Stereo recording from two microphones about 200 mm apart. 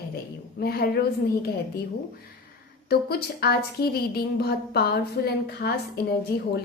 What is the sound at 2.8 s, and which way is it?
A woman's voice, 50° left (ahead or behind).